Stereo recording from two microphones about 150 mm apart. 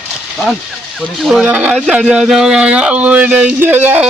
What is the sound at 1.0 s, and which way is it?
Speech, centre (ahead or behind).